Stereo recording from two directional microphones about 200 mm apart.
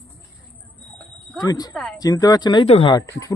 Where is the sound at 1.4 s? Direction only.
20° left (ahead or behind).